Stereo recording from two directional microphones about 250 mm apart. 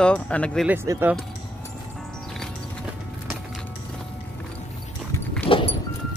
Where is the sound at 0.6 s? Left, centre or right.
Centre.